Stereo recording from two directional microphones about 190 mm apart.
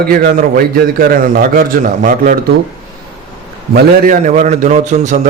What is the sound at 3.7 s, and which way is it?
A man's voice, 45° right (ahead or behind).